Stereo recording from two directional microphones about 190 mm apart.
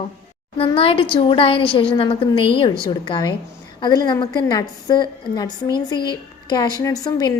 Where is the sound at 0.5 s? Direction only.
30° left (ahead or behind).